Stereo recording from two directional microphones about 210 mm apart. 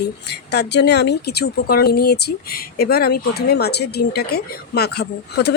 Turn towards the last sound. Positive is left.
turn(degrees=50)  # may be behind; listen again after turning